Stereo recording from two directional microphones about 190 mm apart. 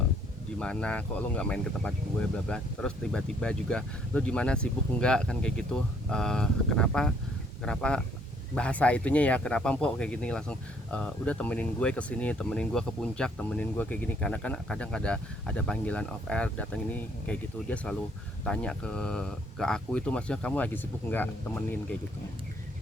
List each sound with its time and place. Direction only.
0.6 s speech: 5° left (ahead or behind)